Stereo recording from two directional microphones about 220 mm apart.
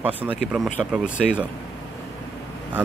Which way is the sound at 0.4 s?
Centre (ahead or behind).